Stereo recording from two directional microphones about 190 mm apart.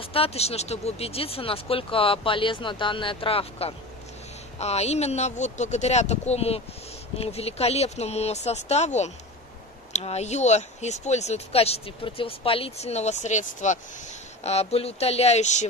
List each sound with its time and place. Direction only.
0.0 s speech: 30° left (ahead or behind)